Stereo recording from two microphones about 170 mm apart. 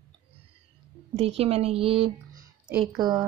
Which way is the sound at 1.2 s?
35° right (ahead or behind).